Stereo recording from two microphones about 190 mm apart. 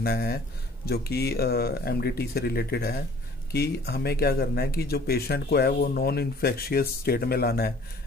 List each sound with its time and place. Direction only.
0.0 s speech: 55° left (ahead or behind)